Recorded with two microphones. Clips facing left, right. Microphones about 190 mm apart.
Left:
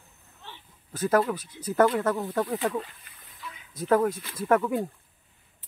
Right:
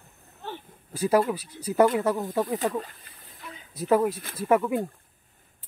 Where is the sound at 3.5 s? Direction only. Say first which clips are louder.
Right 5 dB; 35° right (ahead or behind).